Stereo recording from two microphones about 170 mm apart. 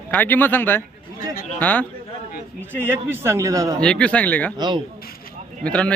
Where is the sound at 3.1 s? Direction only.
15° right (ahead or behind).